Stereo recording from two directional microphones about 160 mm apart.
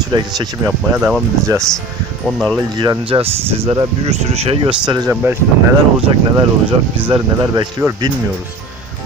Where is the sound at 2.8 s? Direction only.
30° right (ahead or behind).